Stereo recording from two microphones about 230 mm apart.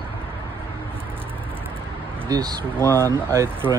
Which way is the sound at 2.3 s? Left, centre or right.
Centre.